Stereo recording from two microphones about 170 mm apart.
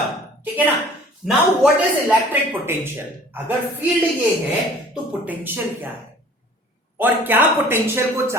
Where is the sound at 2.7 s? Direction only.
15° right (ahead or behind).